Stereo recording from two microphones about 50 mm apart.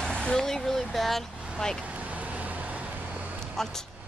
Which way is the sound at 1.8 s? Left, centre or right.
Right.